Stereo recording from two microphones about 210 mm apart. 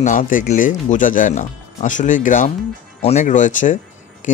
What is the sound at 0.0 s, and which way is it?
Speech, 40° left (ahead or behind).